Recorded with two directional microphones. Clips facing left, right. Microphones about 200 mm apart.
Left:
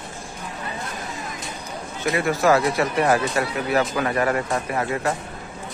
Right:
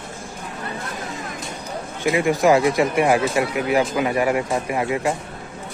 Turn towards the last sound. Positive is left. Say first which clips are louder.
# right 2 dB
turn(degrees=-15)  # may be behind; listen again after turning